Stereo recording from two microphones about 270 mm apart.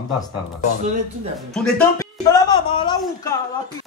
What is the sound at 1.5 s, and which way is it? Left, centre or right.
A woman's voice, centre.